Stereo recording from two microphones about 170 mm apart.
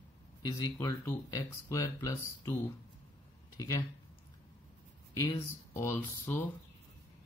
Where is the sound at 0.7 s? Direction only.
20° left (ahead or behind).